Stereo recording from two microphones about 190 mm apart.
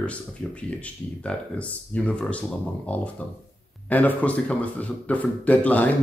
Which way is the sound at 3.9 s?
10° left (ahead or behind).